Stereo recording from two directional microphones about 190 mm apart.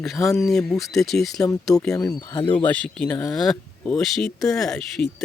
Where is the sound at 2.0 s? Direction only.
20° left (ahead or behind).